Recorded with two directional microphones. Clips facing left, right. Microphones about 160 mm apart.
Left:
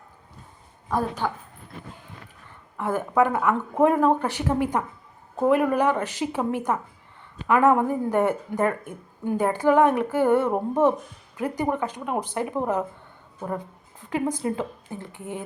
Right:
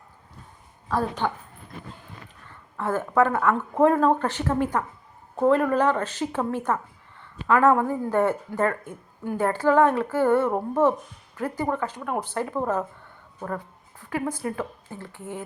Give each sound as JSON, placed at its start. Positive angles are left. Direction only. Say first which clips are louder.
{"t": 0.9, "sound": "speech", "louder": "even", "side_deg": 10}
{"t": 2.5, "sound": "speech", "louder": "even", "side_deg": 15}
{"t": 14.0, "sound": "speech", "louder": "left 2 dB", "side_deg": 20}